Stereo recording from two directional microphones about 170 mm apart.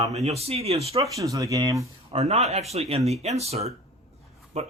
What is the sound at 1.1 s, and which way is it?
Speech, 20° right (ahead or behind).